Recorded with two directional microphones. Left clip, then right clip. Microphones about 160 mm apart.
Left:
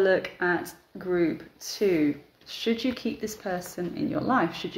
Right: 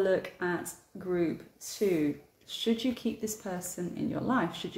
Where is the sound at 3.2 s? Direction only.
35° right (ahead or behind).